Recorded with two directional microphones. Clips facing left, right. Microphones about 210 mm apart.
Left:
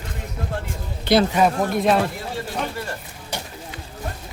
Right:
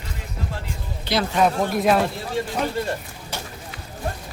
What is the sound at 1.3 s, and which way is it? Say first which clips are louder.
Speech: left 1 dB; 5° left (ahead or behind).